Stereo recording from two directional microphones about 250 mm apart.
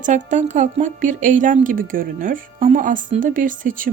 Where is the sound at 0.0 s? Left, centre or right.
Right.